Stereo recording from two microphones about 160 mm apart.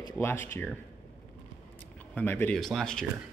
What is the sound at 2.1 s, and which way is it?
Speech, 15° left (ahead or behind).